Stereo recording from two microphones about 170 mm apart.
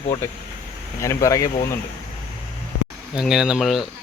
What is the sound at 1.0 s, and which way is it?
Speech, 20° left (ahead or behind).